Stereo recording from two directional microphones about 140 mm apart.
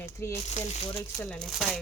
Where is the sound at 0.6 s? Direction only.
50° left (ahead or behind).